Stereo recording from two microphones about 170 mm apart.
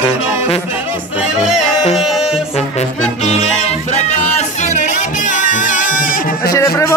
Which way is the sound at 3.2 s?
40° left (ahead or behind).